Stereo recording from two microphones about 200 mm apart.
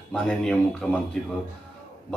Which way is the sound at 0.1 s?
5° left (ahead or behind).